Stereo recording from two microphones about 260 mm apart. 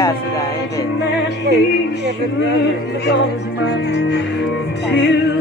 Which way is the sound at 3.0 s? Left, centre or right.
Left.